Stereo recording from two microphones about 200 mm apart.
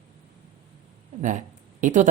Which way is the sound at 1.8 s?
35° right (ahead or behind).